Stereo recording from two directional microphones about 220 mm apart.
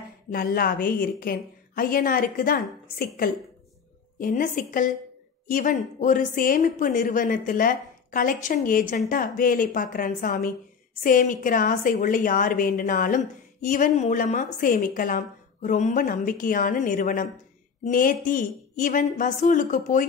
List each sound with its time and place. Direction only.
0.3 s a woman's voice: 45° left (ahead or behind)
4.2 s a woman's voice: 35° left (ahead or behind)